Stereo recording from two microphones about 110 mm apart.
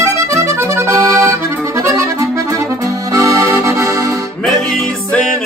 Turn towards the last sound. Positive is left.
turn(degrees=0)  # may be behind; listen again after turning